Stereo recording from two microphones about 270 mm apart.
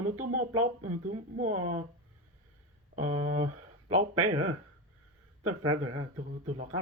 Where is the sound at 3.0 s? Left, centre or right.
Right.